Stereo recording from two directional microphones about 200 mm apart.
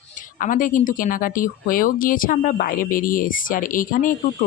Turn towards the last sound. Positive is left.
turn(degrees=45)  # may be behind; listen again after turning